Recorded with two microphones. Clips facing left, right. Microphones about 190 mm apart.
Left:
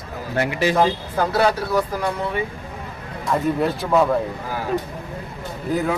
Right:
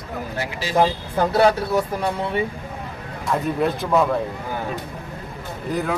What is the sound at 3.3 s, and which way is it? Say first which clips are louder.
Speech: left 1 dB; centre (ahead or behind).